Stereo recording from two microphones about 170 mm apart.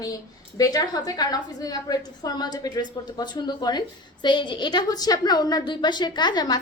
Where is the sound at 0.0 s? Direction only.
20° left (ahead or behind).